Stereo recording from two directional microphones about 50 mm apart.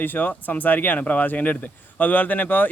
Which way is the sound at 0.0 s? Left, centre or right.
Left.